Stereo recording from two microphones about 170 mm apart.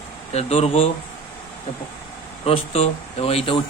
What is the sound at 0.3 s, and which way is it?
Speech, 40° left (ahead or behind).